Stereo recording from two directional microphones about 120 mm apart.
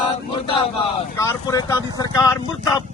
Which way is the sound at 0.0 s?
45° left (ahead or behind).